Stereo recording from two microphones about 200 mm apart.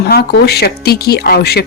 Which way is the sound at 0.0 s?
55° left (ahead or behind).